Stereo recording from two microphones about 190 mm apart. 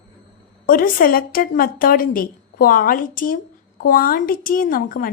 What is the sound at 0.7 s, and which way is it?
A woman's voice, 50° left (ahead or behind).